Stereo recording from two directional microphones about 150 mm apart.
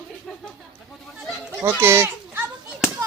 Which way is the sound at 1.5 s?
15° right (ahead or behind).